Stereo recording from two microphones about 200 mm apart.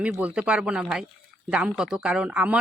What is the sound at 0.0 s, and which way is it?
Speech, 5° right (ahead or behind).